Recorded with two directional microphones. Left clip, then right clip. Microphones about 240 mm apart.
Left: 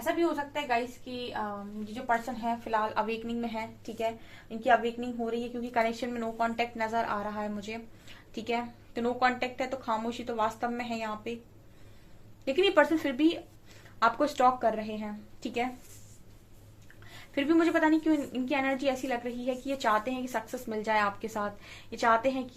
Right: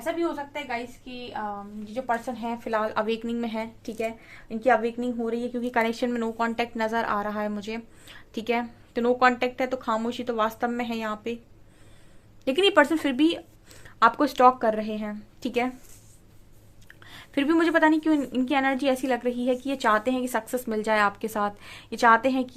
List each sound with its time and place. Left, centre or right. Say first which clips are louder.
0.0 s a woman's voice: right 1 dB; right
12.5 s a woman's voice: right 4 dB; right
17.0 s a woman's voice: right 5 dB; right